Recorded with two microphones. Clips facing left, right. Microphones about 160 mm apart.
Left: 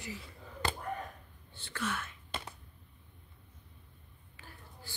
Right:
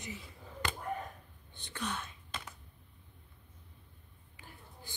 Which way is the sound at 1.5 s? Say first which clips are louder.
Left 2 dB; 15° right (ahead or behind).